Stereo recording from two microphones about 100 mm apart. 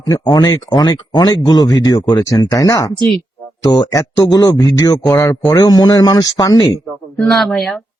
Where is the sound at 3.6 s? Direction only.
35° left (ahead or behind).